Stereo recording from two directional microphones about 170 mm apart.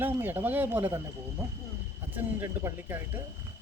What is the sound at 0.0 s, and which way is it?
Speech, 10° right (ahead or behind).